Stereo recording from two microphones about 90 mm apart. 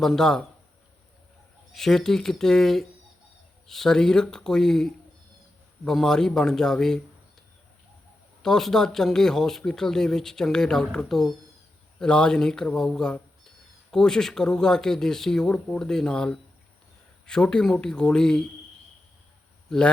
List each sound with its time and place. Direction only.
0.0 s speech: 5° left (ahead or behind)
1.7 s speech: 5° left (ahead or behind)
8.4 s speech: 5° left (ahead or behind)